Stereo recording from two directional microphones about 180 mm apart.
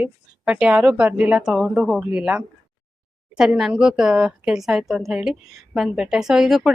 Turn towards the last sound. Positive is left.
turn(degrees=-5)  # may be behind; listen again after turning